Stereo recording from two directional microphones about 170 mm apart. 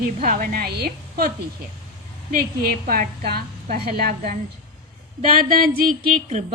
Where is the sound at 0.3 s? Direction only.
55° right (ahead or behind).